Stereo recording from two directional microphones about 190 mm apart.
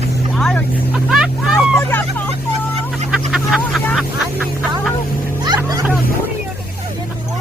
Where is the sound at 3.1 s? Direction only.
5° right (ahead or behind).